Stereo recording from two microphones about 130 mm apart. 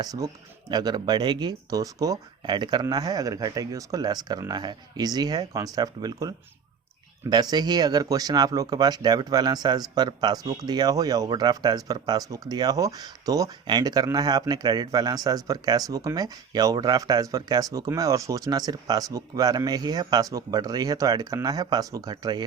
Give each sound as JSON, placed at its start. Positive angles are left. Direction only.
{"t": 0.0, "sound": "speech", "side_deg": -30}